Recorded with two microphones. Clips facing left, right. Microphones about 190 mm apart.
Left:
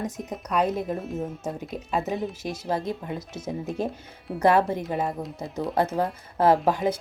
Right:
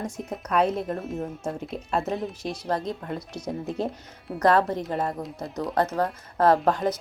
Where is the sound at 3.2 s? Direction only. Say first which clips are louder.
Even; 25° left (ahead or behind).